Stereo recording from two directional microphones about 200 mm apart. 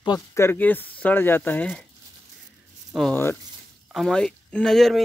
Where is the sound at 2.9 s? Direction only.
5° left (ahead or behind).